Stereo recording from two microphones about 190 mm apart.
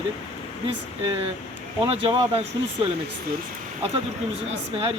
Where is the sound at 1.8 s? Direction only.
30° right (ahead or behind).